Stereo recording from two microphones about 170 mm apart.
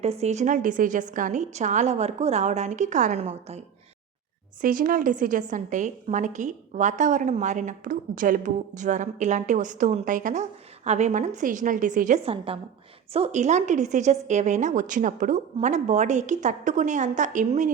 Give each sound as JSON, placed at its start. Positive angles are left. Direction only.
{"t": 0.0, "sound": "a woman's voice", "side_deg": -40}
{"t": 4.6, "sound": "a woman's voice", "side_deg": -55}
{"t": 12.2, "sound": "a woman's voice", "side_deg": -35}